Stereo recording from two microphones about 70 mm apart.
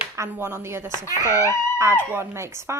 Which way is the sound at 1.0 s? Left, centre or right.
Left.